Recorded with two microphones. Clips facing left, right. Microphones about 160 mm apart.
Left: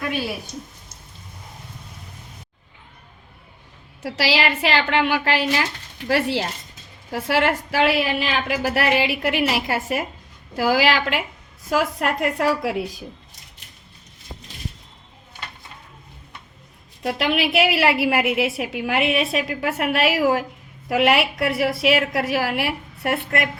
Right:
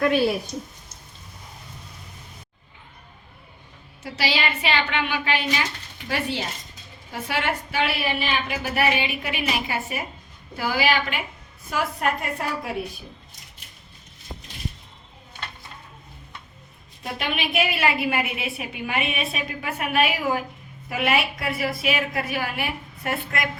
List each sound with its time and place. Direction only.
4.0 s a woman's voice: 90° left
17.0 s a woman's voice: 90° left; by 23.5 s 70° left (ahead or behind)